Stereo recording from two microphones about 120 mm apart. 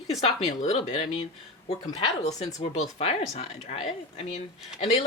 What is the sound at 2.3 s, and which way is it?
Speech, 30° left (ahead or behind).